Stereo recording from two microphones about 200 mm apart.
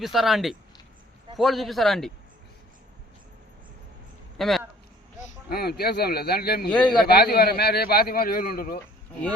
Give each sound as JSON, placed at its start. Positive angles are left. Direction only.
{"t": 0.0, "sound": "a man's voice", "side_deg": 0}
{"t": 4.4, "sound": "speech", "side_deg": 0}
{"t": 5.5, "sound": "a man's voice", "side_deg": 50}
{"t": 6.7, "sound": "a man's voice", "side_deg": 5}
{"t": 7.1, "sound": "a man's voice", "side_deg": 50}